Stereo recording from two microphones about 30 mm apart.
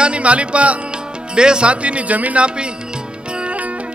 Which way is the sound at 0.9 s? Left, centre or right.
Right.